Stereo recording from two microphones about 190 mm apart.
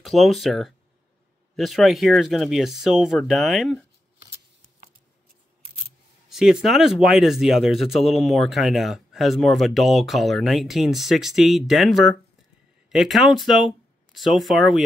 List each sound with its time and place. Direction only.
0.0 s speech: centre (ahead or behind)
6.2 s speech: 5° right (ahead or behind)